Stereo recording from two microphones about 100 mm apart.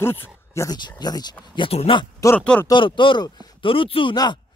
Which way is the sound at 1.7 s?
80° left.